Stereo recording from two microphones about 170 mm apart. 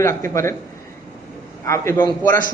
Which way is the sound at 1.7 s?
15° left (ahead or behind).